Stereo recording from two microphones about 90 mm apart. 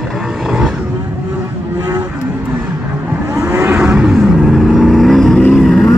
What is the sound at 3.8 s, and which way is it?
Vehicle, 10° right (ahead or behind).